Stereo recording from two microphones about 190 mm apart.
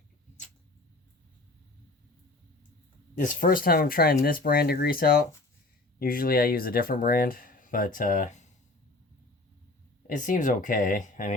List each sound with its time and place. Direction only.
3.2 s speech: 45° left (ahead or behind)
10.1 s speech: 45° left (ahead or behind)